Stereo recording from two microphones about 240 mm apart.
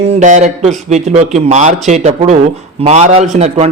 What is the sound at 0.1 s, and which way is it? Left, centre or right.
A man's voice, right.